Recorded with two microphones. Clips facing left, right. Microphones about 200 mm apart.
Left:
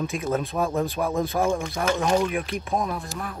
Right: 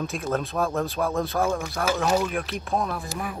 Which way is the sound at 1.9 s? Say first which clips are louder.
Left 1 dB; 5° right (ahead or behind).